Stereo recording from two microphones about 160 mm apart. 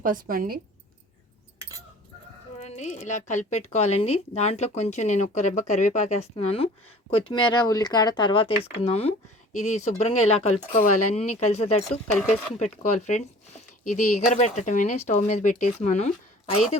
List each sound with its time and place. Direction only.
0.0 s speech: 60° right (ahead or behind)
2.6 s a woman's voice: 45° left (ahead or behind)